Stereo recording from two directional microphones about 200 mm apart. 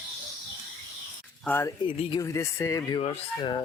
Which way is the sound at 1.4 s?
10° left (ahead or behind).